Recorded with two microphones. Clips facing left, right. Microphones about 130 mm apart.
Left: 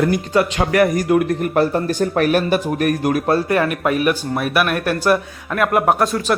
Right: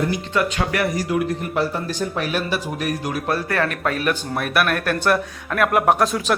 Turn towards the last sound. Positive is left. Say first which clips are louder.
# left 1 dB
turn(degrees=0)  # may be behind; listen again after turning